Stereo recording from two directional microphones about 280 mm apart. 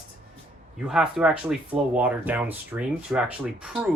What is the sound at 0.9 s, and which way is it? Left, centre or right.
Speech, centre.